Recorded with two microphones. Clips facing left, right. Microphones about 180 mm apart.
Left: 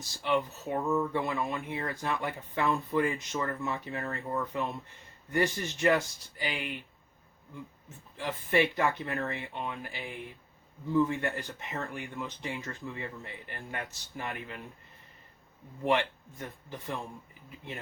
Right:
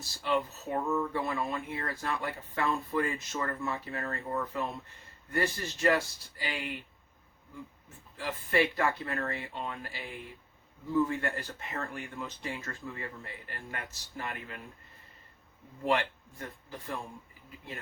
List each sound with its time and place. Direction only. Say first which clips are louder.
0.0 s speech: left 1 dB; 20° left (ahead or behind)
8.1 s speech: left 2 dB; 20° left (ahead or behind)
11.1 s speech: left 1 dB; 20° left (ahead or behind)
15.8 s speech: left 1 dB; 20° left (ahead or behind)